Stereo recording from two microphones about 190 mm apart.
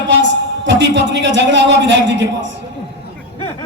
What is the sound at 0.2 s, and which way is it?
A woman's voice, 70° right (ahead or behind).